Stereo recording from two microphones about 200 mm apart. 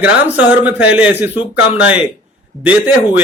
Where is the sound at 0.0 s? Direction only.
10° right (ahead or behind).